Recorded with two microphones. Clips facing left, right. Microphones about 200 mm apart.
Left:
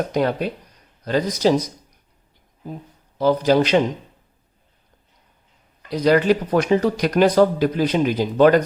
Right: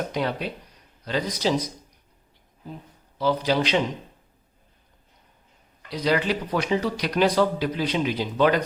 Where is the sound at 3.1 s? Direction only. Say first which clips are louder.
Left 6 dB; 45° left (ahead or behind).